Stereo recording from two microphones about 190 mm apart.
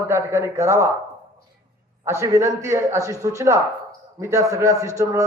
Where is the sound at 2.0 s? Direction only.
15° right (ahead or behind).